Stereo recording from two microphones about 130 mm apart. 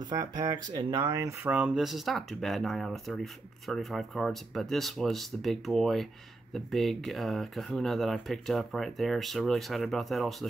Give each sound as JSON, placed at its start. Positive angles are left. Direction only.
{"t": 0.0, "sound": "speech", "side_deg": -30}
{"t": 1.5, "sound": "speech", "side_deg": -5}